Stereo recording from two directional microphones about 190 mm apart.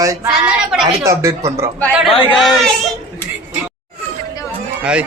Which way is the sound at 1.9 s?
5° right (ahead or behind).